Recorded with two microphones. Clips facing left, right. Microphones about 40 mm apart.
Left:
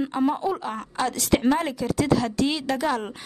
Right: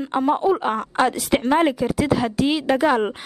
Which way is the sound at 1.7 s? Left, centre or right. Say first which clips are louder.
Right 2 dB; centre.